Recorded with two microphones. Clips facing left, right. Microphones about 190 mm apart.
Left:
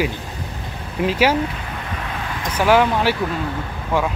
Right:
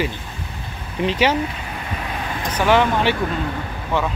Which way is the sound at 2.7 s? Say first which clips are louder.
Left 1 dB; 5° left (ahead or behind).